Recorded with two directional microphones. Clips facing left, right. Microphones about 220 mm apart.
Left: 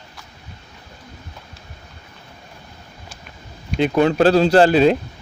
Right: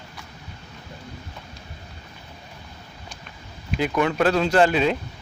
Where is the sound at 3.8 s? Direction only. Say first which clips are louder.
Left 6 dB; 30° left (ahead or behind).